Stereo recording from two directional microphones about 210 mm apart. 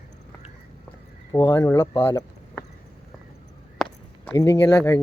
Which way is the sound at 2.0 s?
10° left (ahead or behind).